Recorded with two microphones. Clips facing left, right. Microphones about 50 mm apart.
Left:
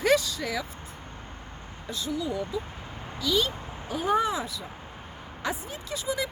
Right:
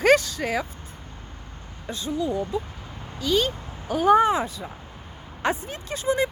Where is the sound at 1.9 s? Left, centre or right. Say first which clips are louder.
Right 4 dB; right.